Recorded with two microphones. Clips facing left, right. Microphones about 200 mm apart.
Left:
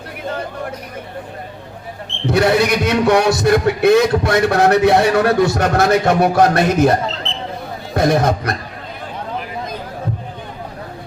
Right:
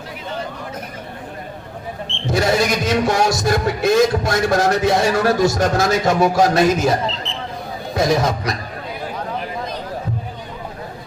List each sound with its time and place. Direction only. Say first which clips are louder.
2.2 s a man's voice: left 3 dB; 60° left (ahead or behind)